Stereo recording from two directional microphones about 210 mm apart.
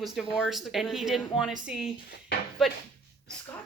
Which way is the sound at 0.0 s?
Centre (ahead or behind).